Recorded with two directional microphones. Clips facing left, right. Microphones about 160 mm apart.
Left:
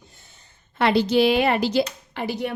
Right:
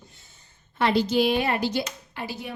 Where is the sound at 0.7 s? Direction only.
70° left (ahead or behind).